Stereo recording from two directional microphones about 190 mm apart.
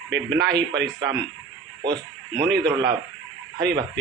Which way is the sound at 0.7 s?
65° right (ahead or behind).